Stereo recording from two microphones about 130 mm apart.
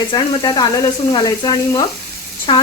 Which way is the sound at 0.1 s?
35° left (ahead or behind).